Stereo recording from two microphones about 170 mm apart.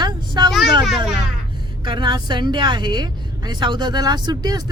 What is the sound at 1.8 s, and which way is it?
A woman's voice, 25° right (ahead or behind).